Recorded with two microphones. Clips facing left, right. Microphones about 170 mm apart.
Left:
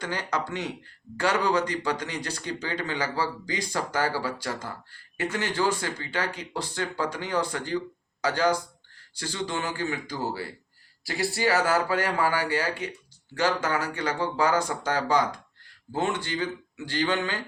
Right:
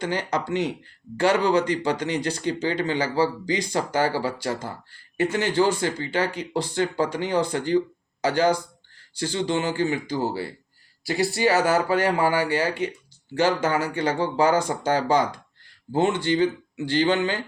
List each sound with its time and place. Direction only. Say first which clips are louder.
0.0 s speech: right 4 dB; 25° right (ahead or behind)